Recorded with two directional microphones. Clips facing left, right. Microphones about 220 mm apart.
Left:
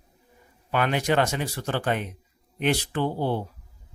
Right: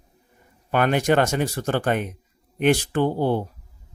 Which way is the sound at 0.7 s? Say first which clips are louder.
Right 4 dB; 50° right (ahead or behind).